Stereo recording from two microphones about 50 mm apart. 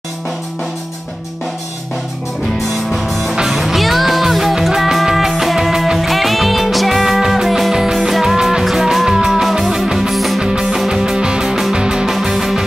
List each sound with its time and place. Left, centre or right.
2.6 s music: centre
10.4 s music: centre